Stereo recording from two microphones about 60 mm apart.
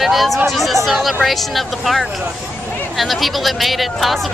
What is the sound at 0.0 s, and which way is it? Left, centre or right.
Speech, centre.